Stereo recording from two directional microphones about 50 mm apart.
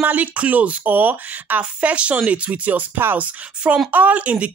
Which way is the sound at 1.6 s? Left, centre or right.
Right.